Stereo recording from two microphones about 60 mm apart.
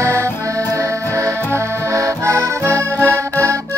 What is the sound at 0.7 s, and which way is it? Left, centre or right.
Music, right.